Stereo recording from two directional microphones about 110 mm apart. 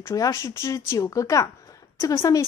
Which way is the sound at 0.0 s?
30° left (ahead or behind).